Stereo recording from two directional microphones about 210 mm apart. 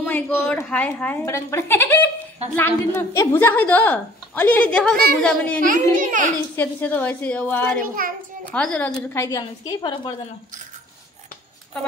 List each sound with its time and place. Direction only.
0.0 s a woman's voice: 10° left (ahead or behind)
4.9 s a woman's voice: 45° right (ahead or behind)
5.2 s a child's voice: 5° left (ahead or behind)
5.6 s a child's voice: 40° right (ahead or behind)
6.5 s a woman's voice: 5° left (ahead or behind)